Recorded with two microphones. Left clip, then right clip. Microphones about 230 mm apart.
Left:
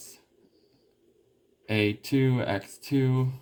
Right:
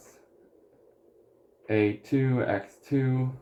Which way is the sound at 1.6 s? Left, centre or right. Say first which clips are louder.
Right 2 dB; left.